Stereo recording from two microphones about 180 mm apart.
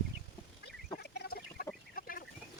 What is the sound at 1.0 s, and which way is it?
Chicken, 65° left (ahead or behind).